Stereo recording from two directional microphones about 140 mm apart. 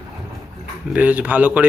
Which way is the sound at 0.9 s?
10° right (ahead or behind).